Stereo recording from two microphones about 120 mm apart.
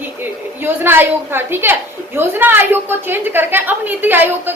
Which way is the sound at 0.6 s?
20° right (ahead or behind).